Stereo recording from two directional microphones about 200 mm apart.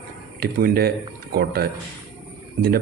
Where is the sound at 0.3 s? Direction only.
50° right (ahead or behind).